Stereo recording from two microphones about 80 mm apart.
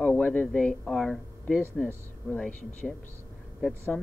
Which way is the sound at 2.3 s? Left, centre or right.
Centre.